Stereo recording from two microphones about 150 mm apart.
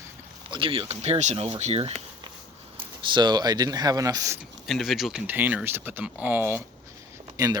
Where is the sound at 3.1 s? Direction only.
30° right (ahead or behind).